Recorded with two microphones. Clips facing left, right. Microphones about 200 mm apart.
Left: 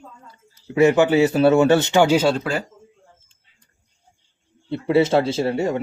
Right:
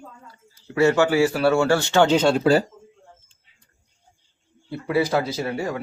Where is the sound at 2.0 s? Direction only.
10° left (ahead or behind).